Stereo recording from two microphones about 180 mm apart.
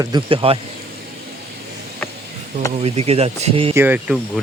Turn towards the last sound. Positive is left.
turn(degrees=-5)  # may be behind; listen again after turning